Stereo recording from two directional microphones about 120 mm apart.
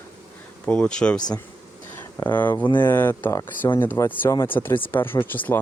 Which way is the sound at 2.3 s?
15° left (ahead or behind).